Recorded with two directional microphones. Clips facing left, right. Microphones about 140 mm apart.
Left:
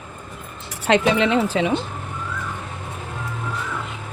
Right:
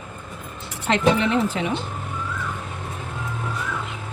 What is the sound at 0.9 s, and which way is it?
Speech, 90° left.